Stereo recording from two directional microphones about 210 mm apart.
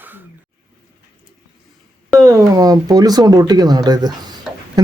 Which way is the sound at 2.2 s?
15° right (ahead or behind).